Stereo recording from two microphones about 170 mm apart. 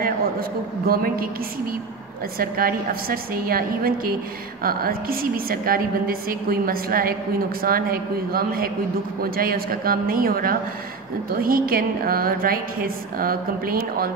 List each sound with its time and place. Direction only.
0.0 s a woman's voice: 60° right (ahead or behind)
2.3 s a woman's voice: 60° right (ahead or behind)